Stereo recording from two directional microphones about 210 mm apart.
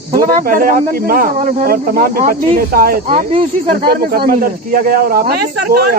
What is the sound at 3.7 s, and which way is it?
Speech, 45° right (ahead or behind).